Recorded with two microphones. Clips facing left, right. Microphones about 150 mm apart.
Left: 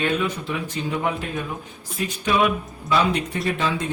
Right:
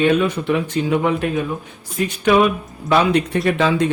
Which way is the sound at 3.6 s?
90° right.